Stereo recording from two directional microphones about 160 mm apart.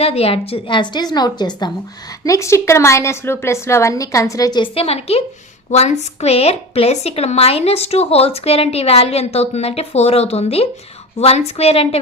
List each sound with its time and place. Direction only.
0.0 s a woman's voice: 40° left (ahead or behind)